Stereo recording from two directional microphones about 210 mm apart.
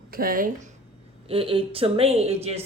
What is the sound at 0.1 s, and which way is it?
Speech, 40° right (ahead or behind).